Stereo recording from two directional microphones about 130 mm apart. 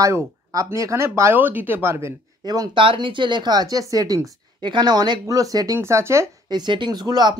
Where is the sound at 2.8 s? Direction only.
40° right (ahead or behind); by 6.6 s 20° right (ahead or behind).